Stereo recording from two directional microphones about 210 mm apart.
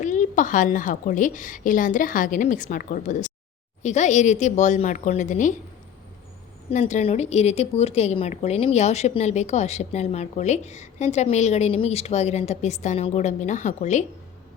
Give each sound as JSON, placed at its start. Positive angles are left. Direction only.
{"t": 0.0, "sound": "speech", "side_deg": 35}
{"t": 6.7, "sound": "a woman's voice", "side_deg": 35}